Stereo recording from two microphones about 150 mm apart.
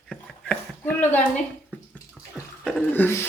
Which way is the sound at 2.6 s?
10° left (ahead or behind).